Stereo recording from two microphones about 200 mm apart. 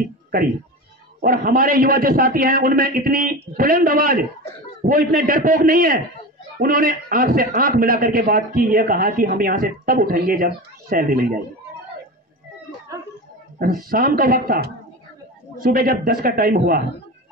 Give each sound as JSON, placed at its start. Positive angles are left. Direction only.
{"t": 1.2, "sound": "a man's voice", "side_deg": -45}
{"t": 13.6, "sound": "a man's voice", "side_deg": -45}